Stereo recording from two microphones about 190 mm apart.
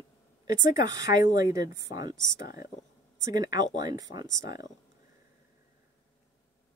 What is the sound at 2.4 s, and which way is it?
Speech, 50° left (ahead or behind).